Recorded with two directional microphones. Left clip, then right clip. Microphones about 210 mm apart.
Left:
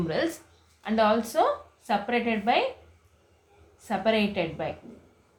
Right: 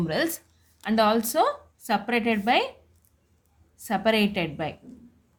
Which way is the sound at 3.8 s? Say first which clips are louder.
Right 2 dB; 50° right (ahead or behind).